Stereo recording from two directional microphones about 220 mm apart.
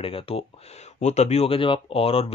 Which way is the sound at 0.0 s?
25° left (ahead or behind).